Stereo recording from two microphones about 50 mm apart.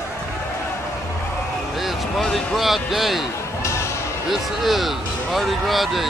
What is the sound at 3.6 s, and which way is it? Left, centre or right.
Basketball bounce, left.